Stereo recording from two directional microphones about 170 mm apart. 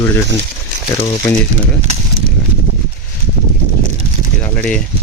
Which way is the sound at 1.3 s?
10° left (ahead or behind).